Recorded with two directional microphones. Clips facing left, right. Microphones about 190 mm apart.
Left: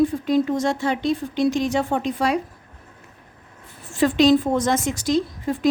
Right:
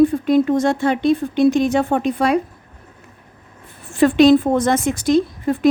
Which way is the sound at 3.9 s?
55° right (ahead or behind).